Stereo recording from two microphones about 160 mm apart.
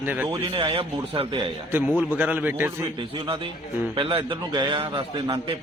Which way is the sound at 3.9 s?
35° right (ahead or behind).